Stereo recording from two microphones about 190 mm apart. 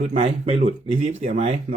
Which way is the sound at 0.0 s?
35° right (ahead or behind).